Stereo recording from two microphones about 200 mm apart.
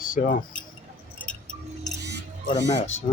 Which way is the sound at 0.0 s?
45° left (ahead or behind).